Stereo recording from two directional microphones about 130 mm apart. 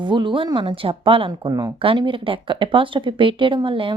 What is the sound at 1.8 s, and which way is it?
A woman's voice, 40° right (ahead or behind).